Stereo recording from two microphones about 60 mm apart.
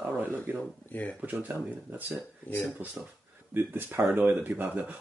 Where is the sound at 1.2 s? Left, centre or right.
Right.